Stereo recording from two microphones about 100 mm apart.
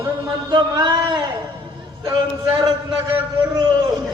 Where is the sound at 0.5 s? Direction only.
45° right (ahead or behind).